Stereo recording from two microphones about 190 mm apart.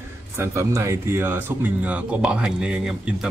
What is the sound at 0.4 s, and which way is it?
Speech, 15° right (ahead or behind).